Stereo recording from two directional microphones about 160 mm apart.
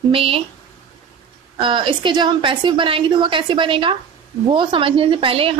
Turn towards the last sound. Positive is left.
turn(degrees=-35)  # may be behind; listen again after turning